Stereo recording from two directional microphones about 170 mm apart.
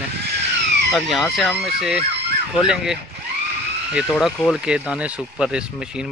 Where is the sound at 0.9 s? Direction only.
Centre (ahead or behind).